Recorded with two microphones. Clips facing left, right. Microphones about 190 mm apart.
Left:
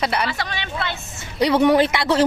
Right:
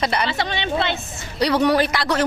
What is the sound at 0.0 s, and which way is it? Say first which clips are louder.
Speech: even; 10° left (ahead or behind).